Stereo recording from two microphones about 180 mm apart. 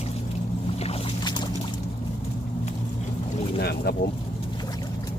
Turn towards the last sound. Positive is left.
turn(degrees=20)  # may be behind; listen again after turning